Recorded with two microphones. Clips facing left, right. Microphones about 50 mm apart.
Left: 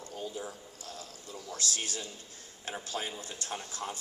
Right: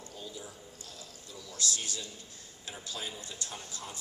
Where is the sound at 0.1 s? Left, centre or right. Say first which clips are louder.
Left 7 dB; left.